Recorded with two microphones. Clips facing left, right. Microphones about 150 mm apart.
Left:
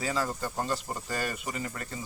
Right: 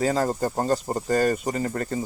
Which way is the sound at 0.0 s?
45° right (ahead or behind).